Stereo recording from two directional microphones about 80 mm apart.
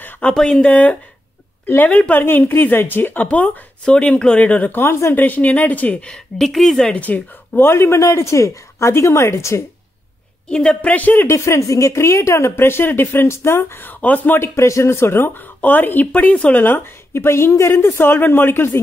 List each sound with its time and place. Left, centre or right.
0.0 s a sound: left
0.3 s speech: centre; by 9.6 s left
10.5 s speech: centre
11.2 s speech: left